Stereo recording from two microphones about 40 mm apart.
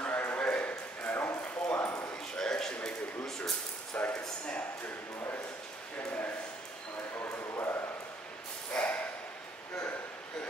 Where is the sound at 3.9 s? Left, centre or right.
Left.